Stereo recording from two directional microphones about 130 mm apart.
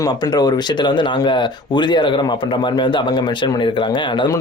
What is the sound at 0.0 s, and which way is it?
Speech, 30° left (ahead or behind).